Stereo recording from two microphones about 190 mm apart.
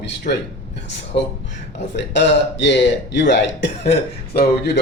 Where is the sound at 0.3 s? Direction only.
45° left (ahead or behind).